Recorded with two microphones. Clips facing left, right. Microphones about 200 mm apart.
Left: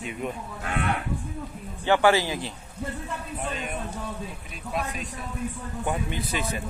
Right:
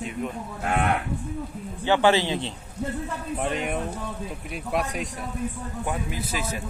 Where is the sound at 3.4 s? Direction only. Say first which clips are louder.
Right 6 dB; 70° right (ahead or behind).